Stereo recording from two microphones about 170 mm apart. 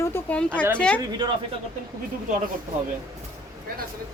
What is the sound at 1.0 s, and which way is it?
Speech, 25° right (ahead or behind).